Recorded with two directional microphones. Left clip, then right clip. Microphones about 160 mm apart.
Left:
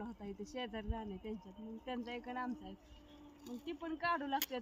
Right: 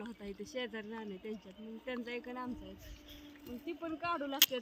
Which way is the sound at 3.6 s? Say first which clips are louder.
Even; 10° left (ahead or behind).